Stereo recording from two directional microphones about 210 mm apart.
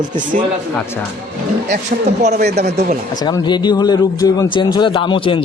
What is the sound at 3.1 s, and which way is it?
Speech, 20° left (ahead or behind).